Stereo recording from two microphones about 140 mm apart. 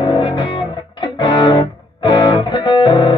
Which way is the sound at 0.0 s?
35° left (ahead or behind).